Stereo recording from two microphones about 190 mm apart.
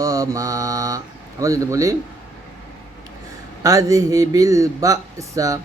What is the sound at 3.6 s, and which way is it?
Speech, 15° right (ahead or behind).